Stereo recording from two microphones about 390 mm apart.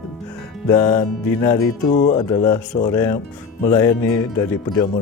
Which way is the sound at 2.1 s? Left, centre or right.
Centre.